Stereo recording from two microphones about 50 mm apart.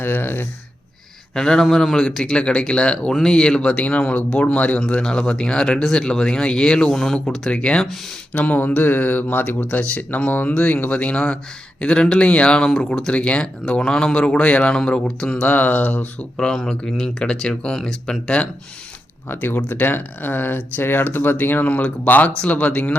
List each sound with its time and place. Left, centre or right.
0.0 s speech: left
1.3 s speech: centre
8.3 s speech: left
14.8 s speech: centre
15.4 s speech: left
16.4 s speech: centre
19.3 s speech: left